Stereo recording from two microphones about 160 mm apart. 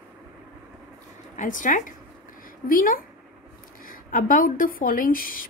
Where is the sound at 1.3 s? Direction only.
55° left (ahead or behind).